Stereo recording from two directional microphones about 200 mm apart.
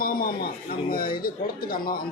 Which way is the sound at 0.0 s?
45° left (ahead or behind).